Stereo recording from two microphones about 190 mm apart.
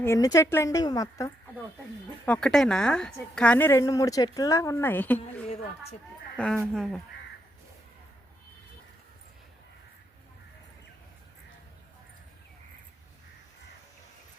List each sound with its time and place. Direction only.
0.0 s a woman's voice: 15° left (ahead or behind)
2.2 s a woman's voice: 5° left (ahead or behind)
6.3 s speech: 5° left (ahead or behind)